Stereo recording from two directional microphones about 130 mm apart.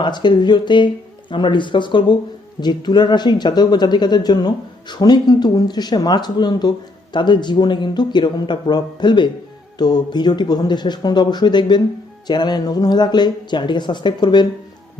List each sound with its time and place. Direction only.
0.0 s speech: 35° left (ahead or behind)